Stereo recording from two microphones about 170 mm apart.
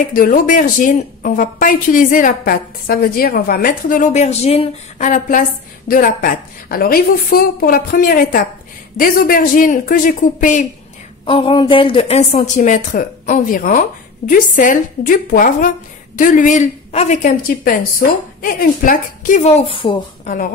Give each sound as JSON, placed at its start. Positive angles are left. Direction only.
{"t": 0.1, "sound": "a woman's voice", "side_deg": 55}
{"t": 11.2, "sound": "speech", "side_deg": 30}